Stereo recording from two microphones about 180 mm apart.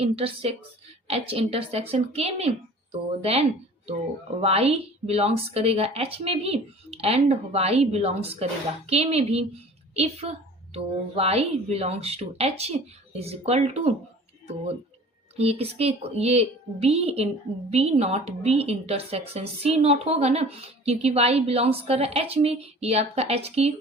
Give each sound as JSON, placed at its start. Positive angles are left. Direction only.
{"t": 0.0, "sound": "a woman's voice", "side_deg": -35}
{"t": 15.4, "sound": "a woman's voice", "side_deg": -35}